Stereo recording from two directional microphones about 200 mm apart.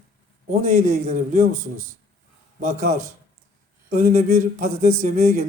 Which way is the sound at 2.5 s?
40° right (ahead or behind).